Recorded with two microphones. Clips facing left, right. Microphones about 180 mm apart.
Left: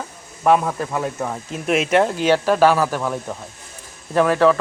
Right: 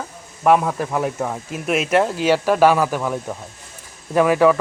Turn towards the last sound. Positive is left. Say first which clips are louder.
# right 1 dB
turn(degrees=-10)  # may be behind; listen again after turning